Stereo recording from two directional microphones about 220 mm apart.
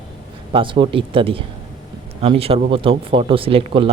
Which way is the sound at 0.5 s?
20° right (ahead or behind).